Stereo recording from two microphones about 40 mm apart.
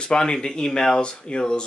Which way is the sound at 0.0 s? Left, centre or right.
Left.